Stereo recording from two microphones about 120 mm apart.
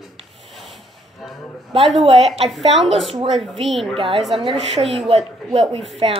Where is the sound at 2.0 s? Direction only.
55° right (ahead or behind).